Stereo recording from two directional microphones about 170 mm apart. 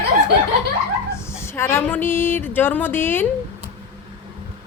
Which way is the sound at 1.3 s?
15° left (ahead or behind).